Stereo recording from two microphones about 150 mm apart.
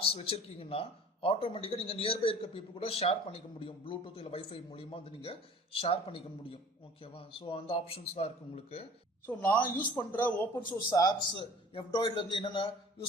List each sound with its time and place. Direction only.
0.0 s speech: 40° left (ahead or behind)
7.3 s speech: 35° left (ahead or behind)
9.2 s speech: 10° left (ahead or behind)
10.8 s speech: 25° left (ahead or behind)